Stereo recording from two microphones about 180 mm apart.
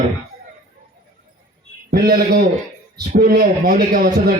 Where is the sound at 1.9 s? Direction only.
60° right (ahead or behind).